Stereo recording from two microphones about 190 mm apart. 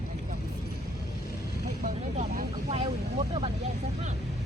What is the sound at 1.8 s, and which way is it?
Vehicle, 40° right (ahead or behind).